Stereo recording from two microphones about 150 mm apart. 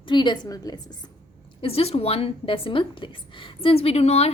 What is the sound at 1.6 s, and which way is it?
Speech, 40° left (ahead or behind).